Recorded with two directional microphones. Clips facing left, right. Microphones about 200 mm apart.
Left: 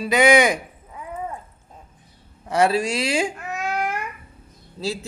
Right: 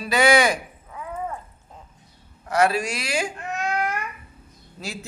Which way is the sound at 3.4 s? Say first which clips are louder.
Even; 5° left (ahead or behind).